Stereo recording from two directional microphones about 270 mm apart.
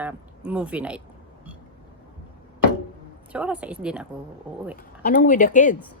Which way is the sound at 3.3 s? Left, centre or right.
Centre.